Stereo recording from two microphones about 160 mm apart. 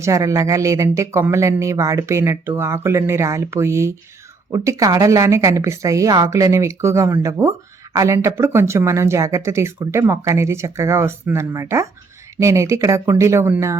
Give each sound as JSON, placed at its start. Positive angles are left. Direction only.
{"t": 0.0, "sound": "a woman's voice", "side_deg": -20}